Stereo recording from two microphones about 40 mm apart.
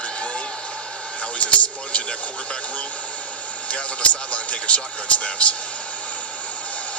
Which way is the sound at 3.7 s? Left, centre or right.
Left.